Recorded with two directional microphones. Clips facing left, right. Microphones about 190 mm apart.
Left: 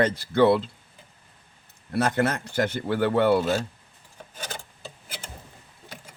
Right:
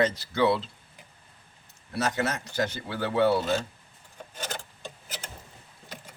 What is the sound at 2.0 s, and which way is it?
Speech, 55° left (ahead or behind).